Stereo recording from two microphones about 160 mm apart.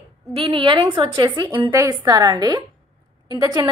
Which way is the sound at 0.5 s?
30° right (ahead or behind).